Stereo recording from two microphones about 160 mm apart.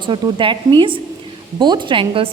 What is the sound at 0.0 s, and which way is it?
A woman's voice, 30° right (ahead or behind).